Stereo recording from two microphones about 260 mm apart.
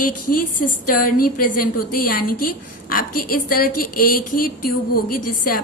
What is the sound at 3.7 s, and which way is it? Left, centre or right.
Speech, left.